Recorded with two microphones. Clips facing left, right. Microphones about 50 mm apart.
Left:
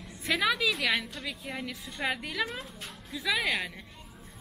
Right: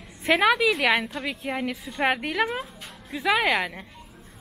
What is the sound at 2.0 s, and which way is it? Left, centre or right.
Speech, right.